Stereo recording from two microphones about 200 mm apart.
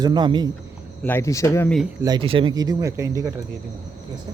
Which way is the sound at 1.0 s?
10° left (ahead or behind).